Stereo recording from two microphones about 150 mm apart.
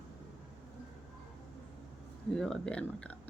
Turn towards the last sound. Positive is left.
turn(degrees=10)  # may be behind; listen again after turning